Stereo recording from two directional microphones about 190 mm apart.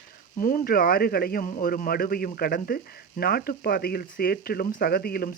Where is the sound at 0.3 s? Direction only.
45° left (ahead or behind).